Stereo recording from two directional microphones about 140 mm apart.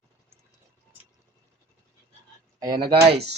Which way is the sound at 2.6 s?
25° right (ahead or behind).